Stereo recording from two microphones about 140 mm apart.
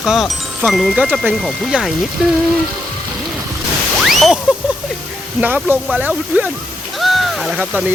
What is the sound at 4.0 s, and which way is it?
Slosh, centre (ahead or behind).